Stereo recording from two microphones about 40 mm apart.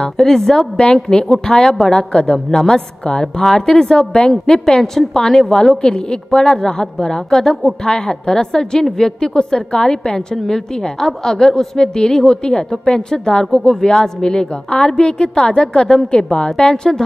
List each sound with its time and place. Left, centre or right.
0.0 s a woman's voice: centre
5.8 s a woman's voice: centre